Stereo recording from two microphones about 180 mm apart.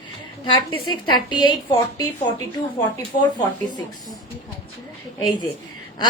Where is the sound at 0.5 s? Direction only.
25° left (ahead or behind).